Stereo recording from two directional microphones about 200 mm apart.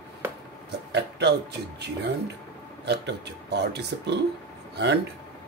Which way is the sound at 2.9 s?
55° right (ahead or behind).